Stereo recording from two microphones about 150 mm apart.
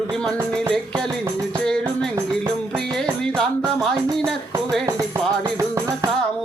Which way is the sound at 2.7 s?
5° left (ahead or behind).